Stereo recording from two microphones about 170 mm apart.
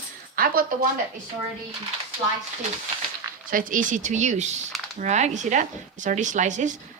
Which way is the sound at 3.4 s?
50° right (ahead or behind).